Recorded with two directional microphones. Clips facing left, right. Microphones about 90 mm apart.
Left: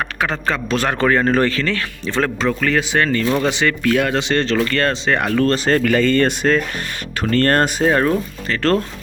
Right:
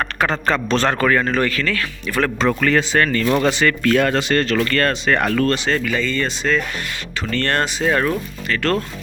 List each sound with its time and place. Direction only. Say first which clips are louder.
0.2 s a man's voice: right 2 dB; centre (ahead or behind)
0.9 s speech: left 2 dB; 25° left (ahead or behind)
2.5 s a man's voice: right 3 dB; centre (ahead or behind)
2.9 s speech: even; 20° left (ahead or behind)
4.2 s speech: even; 25° left (ahead or behind)
5.6 s speech: left 5 dB; 50° left (ahead or behind)
7.9 s speech: left 3 dB; 25° left (ahead or behind)